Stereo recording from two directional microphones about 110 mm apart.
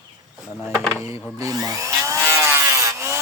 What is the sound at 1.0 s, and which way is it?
Speech, 30° right (ahead or behind).